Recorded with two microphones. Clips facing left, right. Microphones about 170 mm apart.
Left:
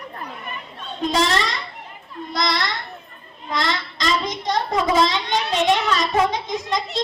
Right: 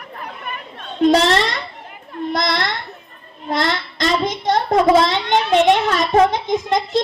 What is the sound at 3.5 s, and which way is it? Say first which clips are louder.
Child singing: right 4 dB; 55° right (ahead or behind).